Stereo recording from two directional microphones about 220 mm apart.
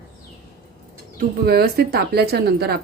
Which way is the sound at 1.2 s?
45° right (ahead or behind).